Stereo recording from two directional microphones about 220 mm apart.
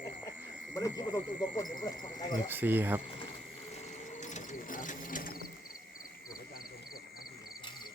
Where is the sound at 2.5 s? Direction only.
10° right (ahead or behind).